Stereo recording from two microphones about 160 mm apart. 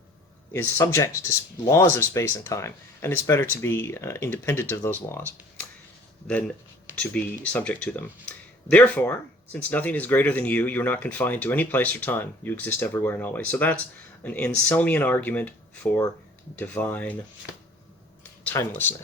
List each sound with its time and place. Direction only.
0.5 s speech: 15° left (ahead or behind)
7.0 s speech: 5° left (ahead or behind)
18.2 s a sound: 15° left (ahead or behind)